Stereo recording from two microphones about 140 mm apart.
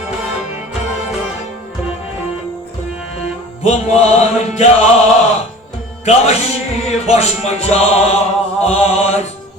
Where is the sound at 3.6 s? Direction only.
50° left (ahead or behind).